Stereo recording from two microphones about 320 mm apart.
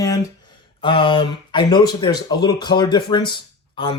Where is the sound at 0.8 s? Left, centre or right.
Centre.